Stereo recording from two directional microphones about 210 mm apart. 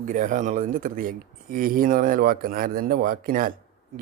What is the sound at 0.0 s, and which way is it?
Speech, 40° right (ahead or behind).